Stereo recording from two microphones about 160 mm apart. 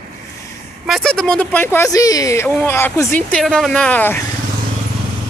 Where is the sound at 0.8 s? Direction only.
5° left (ahead or behind).